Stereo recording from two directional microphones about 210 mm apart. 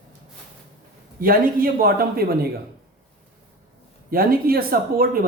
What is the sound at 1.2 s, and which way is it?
Speech, 45° right (ahead or behind).